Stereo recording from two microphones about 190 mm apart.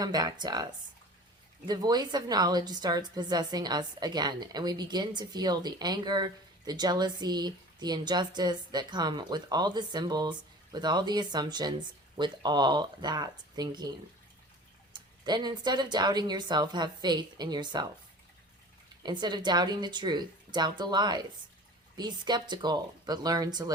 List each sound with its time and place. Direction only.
0.0 s a woman's voice: 20° right (ahead or behind)
14.9 s a woman's voice: 25° right (ahead or behind)
19.0 s a woman's voice: 20° right (ahead or behind)